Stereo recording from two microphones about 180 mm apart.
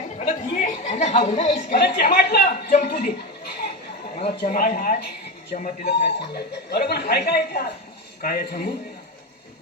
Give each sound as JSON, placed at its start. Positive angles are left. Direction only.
{"t": 0.2, "sound": "a woman's voice", "side_deg": 40}
{"t": 1.7, "sound": "speech", "side_deg": 65}
{"t": 4.2, "sound": "speech", "side_deg": 55}